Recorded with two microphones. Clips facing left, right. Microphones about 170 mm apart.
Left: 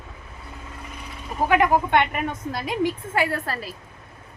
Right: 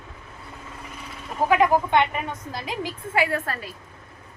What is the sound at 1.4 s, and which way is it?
Speech, 60° left (ahead or behind).